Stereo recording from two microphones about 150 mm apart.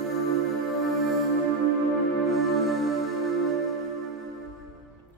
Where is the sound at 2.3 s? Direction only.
Centre (ahead or behind).